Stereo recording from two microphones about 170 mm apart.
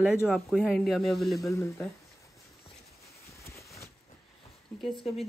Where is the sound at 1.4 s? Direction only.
15° left (ahead or behind).